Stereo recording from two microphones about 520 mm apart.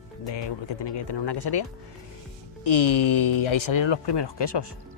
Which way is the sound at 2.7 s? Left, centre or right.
Left.